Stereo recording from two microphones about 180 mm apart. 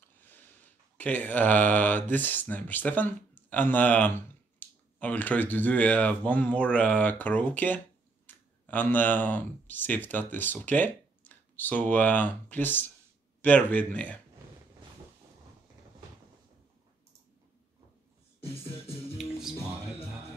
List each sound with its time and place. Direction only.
0.9 s speech: 10° left (ahead or behind)
18.4 s music: 30° left (ahead or behind)
19.1 s music: centre (ahead or behind)